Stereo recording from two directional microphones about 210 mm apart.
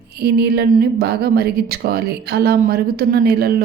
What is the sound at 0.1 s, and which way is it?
A woman's voice, 50° right (ahead or behind).